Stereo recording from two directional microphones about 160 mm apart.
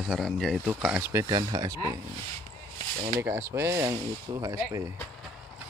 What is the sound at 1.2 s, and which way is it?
Speech, 25° right (ahead or behind).